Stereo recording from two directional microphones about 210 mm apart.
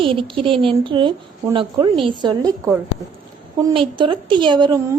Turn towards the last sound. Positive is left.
turn(degrees=-20)  # may be behind; listen again after turning